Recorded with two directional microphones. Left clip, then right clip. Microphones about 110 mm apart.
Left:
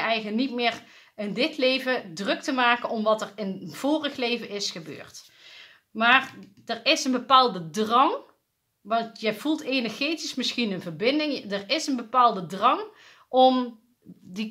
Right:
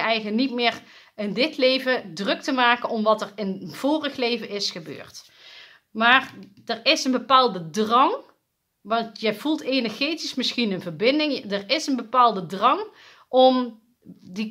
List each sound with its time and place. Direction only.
0.0 s speech: 30° right (ahead or behind)